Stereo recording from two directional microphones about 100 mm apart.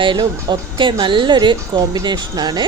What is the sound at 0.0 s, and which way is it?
A woman's voice, 50° right (ahead or behind).